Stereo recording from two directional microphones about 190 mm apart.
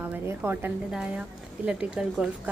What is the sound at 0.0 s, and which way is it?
A woman's voice, 10° right (ahead or behind).